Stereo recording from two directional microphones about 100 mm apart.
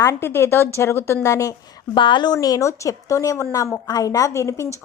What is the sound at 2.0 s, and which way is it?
A woman's voice, 50° left (ahead or behind).